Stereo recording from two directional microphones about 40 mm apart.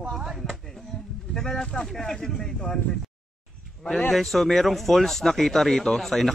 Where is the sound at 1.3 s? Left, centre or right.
Centre.